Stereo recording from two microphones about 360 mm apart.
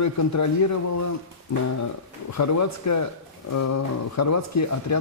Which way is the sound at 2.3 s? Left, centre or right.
Left.